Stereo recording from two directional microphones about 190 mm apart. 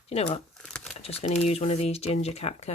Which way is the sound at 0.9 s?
35° left (ahead or behind).